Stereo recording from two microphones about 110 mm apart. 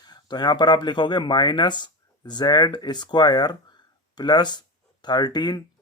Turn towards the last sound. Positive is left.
turn(degrees=40)  # may be behind; listen again after turning